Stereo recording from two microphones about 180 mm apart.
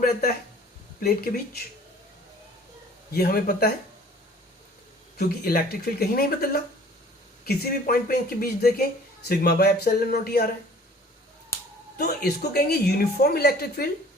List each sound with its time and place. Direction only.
0.0 s speech: 55° left (ahead or behind)
3.1 s speech: 60° left (ahead or behind)
5.1 s speech: 55° left (ahead or behind)
11.9 s speech: 60° left (ahead or behind)